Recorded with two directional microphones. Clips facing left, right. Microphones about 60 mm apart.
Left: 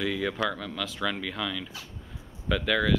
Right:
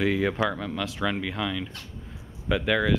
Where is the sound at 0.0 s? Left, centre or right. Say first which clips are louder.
Right 4 dB; right.